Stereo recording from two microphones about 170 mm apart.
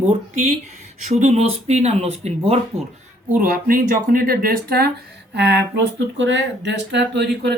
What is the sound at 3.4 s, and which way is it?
Speech, 55° right (ahead or behind).